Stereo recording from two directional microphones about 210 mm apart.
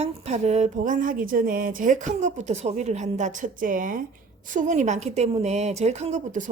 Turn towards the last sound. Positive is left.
turn(degrees=-35)  # may be behind; listen again after turning